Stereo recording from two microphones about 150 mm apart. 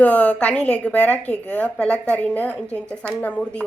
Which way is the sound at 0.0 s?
10° left (ahead or behind).